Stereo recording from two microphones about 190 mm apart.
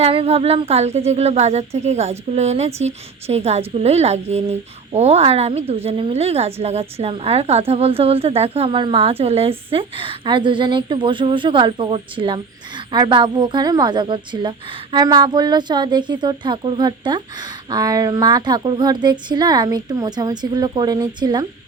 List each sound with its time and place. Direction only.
0.0 s speech: 30° right (ahead or behind)